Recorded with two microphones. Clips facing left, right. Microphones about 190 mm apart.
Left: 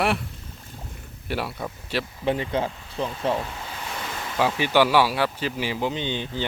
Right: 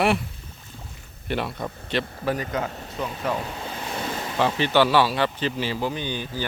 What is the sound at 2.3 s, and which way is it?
Speech, 25° left (ahead or behind).